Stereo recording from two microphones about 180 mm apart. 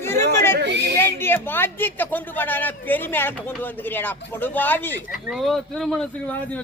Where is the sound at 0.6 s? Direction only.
70° right (ahead or behind).